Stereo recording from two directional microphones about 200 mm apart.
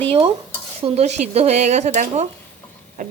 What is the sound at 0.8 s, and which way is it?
Speech, 30° right (ahead or behind).